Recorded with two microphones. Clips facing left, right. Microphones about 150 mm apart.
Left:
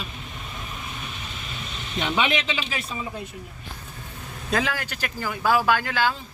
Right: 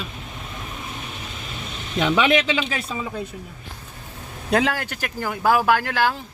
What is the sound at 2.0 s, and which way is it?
Speech, 80° right.